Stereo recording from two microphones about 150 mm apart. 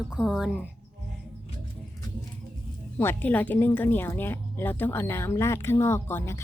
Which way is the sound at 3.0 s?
15° left (ahead or behind).